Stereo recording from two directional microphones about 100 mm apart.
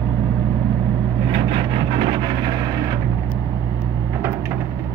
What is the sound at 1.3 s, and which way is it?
Vehicle, 65° right (ahead or behind).